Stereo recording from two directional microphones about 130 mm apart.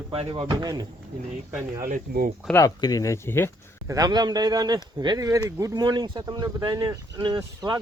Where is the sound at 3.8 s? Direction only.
30° right (ahead or behind).